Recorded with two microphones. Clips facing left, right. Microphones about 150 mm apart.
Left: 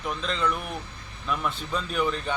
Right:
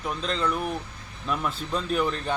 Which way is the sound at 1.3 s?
Centre (ahead or behind).